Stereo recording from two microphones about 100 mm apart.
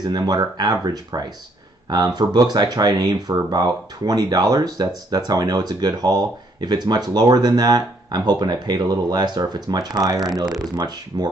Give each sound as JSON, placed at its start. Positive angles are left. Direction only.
{"t": 0.0, "sound": "speech", "side_deg": -45}